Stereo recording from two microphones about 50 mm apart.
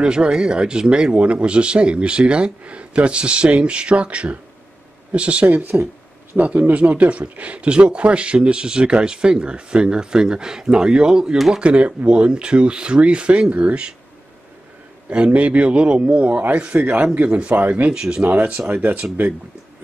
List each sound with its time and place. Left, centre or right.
0.0 s speech: centre
5.5 s speech: right; by 11.6 s centre
11.6 s speech: right
15.0 s speech: right
17.9 s speech: centre
18.2 s speech: right